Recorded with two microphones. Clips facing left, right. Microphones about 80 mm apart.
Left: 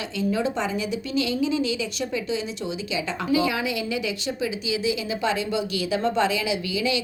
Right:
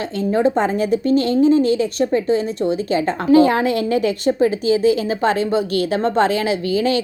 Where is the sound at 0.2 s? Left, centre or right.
Right.